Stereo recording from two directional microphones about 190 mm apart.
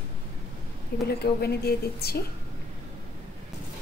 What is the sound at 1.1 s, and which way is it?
A woman's voice, 55° left (ahead or behind).